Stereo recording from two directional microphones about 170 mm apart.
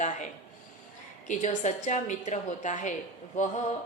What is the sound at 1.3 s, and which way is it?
A woman's voice, 45° left (ahead or behind).